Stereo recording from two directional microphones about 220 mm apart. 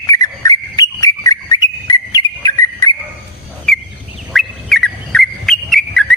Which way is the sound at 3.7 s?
Centre (ahead or behind).